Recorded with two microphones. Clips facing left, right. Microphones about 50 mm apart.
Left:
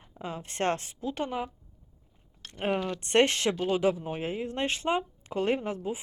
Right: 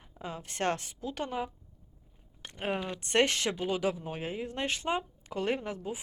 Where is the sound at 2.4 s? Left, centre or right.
Centre.